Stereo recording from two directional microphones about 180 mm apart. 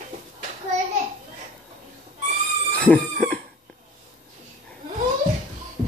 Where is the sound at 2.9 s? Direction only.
5° left (ahead or behind).